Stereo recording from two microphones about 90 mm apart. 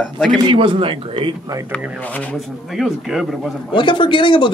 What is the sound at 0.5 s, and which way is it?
Speech, 70° right (ahead or behind).